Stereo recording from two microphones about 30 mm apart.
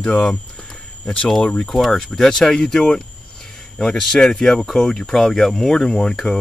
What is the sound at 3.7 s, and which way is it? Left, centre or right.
Speech, centre.